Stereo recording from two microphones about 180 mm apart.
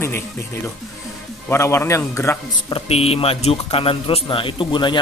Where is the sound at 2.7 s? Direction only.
30° left (ahead or behind).